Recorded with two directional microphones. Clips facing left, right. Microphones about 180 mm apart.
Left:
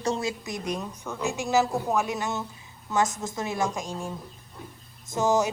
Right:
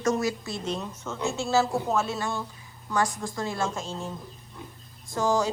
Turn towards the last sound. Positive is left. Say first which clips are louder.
# left 1 dB
turn(degrees=20)  # may be behind; listen again after turning